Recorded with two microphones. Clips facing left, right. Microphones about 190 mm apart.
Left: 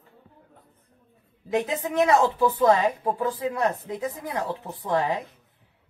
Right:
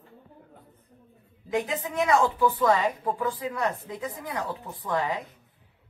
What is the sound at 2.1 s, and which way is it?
Speech, 25° left (ahead or behind).